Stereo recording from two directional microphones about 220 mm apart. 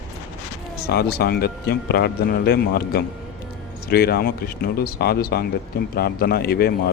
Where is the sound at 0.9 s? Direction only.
45° left (ahead or behind).